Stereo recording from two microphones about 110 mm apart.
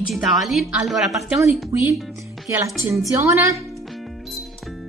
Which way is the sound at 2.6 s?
25° right (ahead or behind).